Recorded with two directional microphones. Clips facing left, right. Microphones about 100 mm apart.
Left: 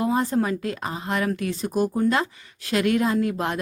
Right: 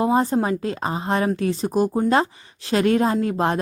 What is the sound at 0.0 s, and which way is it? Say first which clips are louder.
Speech: right 3 dB; 25° right (ahead or behind).